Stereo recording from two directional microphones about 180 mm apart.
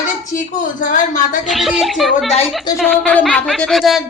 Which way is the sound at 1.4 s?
Centre (ahead or behind).